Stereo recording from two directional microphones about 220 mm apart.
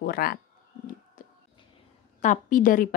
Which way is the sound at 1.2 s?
35° left (ahead or behind).